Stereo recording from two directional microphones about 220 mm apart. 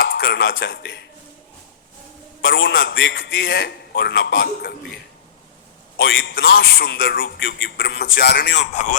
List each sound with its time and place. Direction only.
0.2 s a man's voice: 55° left (ahead or behind)
2.4 s a man's voice: 60° left (ahead or behind)
6.0 s a man's voice: 60° left (ahead or behind)
8.7 s speech: 35° left (ahead or behind)